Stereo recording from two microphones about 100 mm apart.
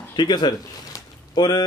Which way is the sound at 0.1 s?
45° left (ahead or behind).